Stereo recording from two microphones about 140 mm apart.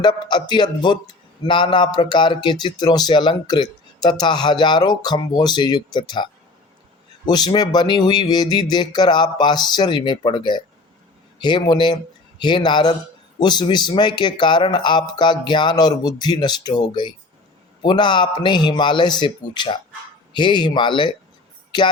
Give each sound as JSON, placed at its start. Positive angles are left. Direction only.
{"t": 0.0, "sound": "speech", "side_deg": 30}
{"t": 7.3, "sound": "speech", "side_deg": 30}